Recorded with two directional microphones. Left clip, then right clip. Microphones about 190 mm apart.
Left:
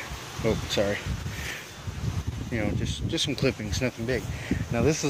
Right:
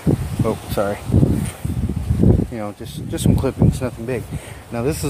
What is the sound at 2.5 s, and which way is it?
Speech, 5° right (ahead or behind).